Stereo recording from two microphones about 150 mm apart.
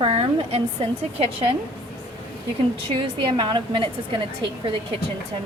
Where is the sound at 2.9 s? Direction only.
35° right (ahead or behind).